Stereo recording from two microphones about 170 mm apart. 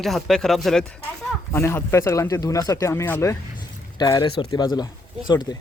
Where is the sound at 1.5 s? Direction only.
15° left (ahead or behind).